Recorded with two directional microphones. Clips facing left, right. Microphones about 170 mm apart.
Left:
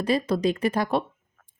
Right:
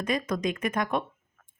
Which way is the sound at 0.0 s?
35° left (ahead or behind).